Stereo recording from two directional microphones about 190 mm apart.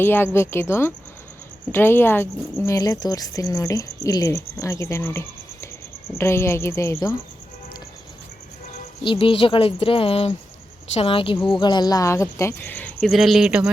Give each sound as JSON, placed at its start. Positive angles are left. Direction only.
{"t": 0.0, "sound": "speech", "side_deg": 10}
{"t": 9.0, "sound": "speech", "side_deg": 30}
{"t": 13.1, "sound": "speech", "side_deg": 0}